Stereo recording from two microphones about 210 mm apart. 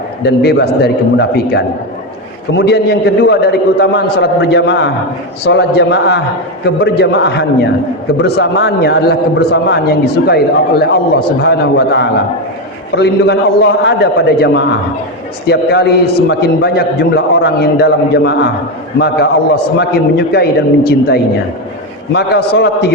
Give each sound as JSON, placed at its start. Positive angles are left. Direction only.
{"t": 0.2, "sound": "a man's voice", "side_deg": 50}